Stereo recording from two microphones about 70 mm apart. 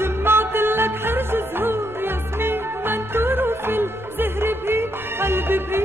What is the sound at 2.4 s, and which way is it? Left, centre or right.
Music, right.